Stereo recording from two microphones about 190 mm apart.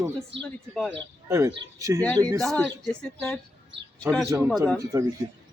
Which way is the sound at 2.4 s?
Centre (ahead or behind).